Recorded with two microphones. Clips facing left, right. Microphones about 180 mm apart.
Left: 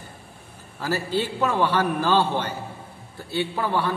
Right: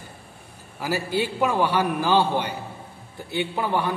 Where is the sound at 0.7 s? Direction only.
10° right (ahead or behind).